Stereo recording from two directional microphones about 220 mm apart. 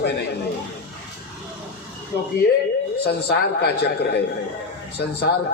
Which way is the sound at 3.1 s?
45° left (ahead or behind).